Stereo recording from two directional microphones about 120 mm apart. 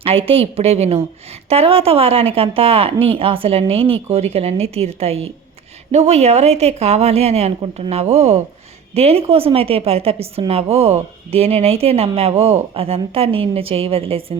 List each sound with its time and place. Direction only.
0.0 s speech: 55° right (ahead or behind)